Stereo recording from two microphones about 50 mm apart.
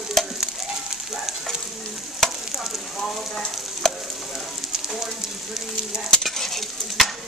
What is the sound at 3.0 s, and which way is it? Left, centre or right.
Frying, centre.